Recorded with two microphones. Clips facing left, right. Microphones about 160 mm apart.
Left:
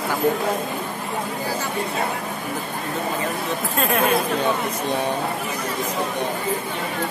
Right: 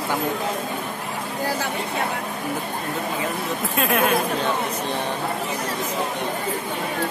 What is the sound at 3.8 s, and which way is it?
Speech, centre (ahead or behind).